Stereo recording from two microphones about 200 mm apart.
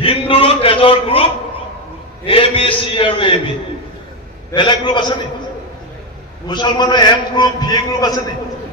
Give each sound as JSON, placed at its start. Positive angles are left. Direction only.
{"t": 0.0, "sound": "a man's voice", "side_deg": 25}
{"t": 4.5, "sound": "a man's voice", "side_deg": 25}
{"t": 6.4, "sound": "a man's voice", "side_deg": 20}